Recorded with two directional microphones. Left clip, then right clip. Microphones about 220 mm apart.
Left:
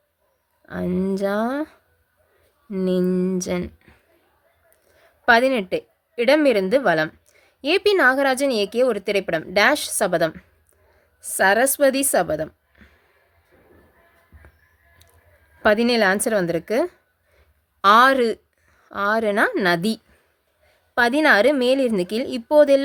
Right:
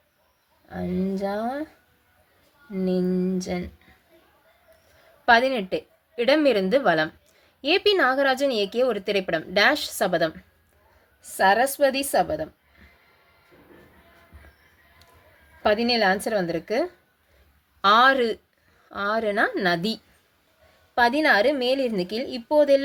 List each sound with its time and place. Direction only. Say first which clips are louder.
0.7 s a woman's voice: left 5 dB; 35° left (ahead or behind)
2.7 s a woman's voice: left 4 dB; 35° left (ahead or behind)
5.2 s a woman's voice: left 2 dB; 25° left (ahead or behind)
15.6 s a woman's voice: left 3 dB; 30° left (ahead or behind)